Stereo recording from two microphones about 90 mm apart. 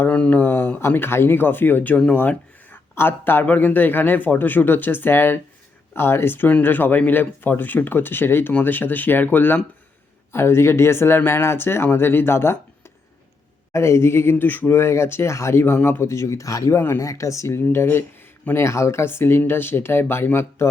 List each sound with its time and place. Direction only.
0.0 s speech: 15° left (ahead or behind)